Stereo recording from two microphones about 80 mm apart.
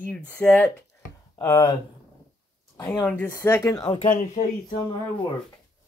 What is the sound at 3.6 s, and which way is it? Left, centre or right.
Speech, left.